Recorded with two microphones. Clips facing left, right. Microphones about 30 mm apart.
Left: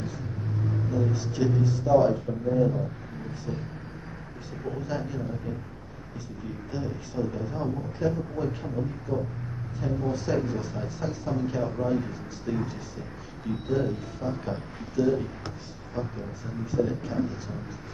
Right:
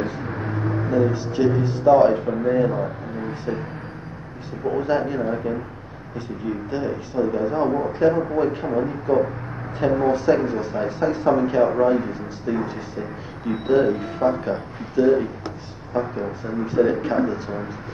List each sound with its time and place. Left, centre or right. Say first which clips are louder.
0.0 s vehicle: right 9 dB; right
0.7 s a sound: right 9 dB; right
1.1 s speech: right 6 dB; right
1.9 s speech: right 8 dB; right
4.6 s a man's voice: right 11 dB; right
8.6 s a man's voice: right 10 dB; right
10.3 s speech: right 7 dB; right
10.8 s a man's voice: right 11 dB; right
11.9 s a man's voice: right 7 dB; right
14.4 s speech: right 8 dB; right
15.4 s a sound: right 6 dB; centre
16.2 s a man's voice: right 10 dB; right